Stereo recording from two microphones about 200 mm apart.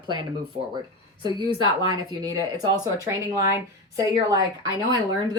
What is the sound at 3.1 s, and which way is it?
A woman's voice, 15° right (ahead or behind).